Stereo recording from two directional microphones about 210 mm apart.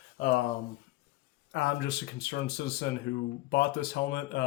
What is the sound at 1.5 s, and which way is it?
Speech, 50° left (ahead or behind).